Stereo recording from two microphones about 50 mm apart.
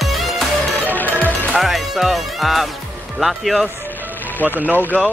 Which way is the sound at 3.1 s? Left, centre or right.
Centre.